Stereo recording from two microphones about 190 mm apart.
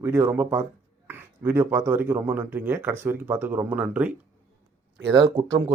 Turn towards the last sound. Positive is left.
turn(degrees=-25)  # may be behind; listen again after turning